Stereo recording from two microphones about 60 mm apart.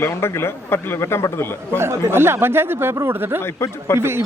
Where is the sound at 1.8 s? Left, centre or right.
Right.